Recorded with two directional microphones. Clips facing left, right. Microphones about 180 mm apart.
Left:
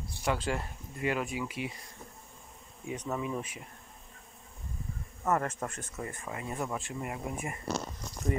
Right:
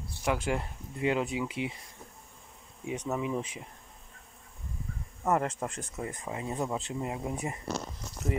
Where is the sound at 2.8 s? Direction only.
10° right (ahead or behind).